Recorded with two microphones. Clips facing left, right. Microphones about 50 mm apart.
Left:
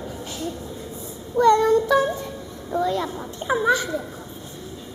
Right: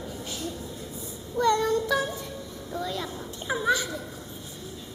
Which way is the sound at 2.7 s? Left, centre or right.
Left.